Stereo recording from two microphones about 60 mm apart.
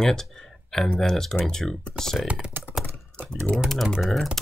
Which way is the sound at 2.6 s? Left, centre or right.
Right.